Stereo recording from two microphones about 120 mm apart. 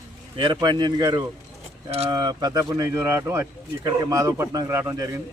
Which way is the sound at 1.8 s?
55° right (ahead or behind).